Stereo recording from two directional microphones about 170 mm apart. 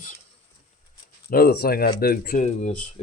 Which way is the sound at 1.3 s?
65° left (ahead or behind).